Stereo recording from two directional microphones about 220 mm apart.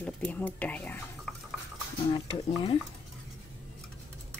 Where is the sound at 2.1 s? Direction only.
25° left (ahead or behind).